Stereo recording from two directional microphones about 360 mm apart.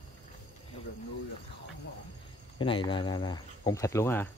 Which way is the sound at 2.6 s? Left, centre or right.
Centre.